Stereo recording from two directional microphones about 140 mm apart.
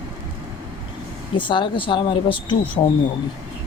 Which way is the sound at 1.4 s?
35° left (ahead or behind).